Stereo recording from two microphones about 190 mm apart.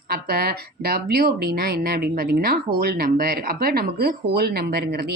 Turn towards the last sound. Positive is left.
turn(degrees=-55)  # may be behind; listen again after turning